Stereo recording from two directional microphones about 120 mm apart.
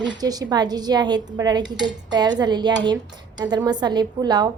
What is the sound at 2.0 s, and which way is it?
A woman's voice, 35° right (ahead or behind).